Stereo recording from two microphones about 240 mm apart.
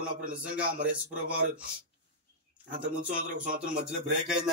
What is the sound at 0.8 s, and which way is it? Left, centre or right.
Speech, centre.